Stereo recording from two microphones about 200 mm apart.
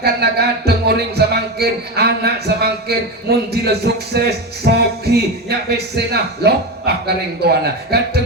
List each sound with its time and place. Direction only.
0.0 s a man's voice: 55° right (ahead or behind)